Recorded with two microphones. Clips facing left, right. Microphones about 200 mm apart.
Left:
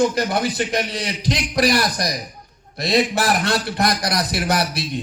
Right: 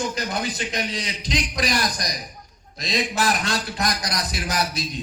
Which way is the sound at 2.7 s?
65° left (ahead or behind).